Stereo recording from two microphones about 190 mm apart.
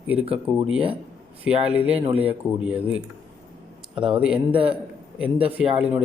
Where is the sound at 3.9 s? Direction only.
25° right (ahead or behind).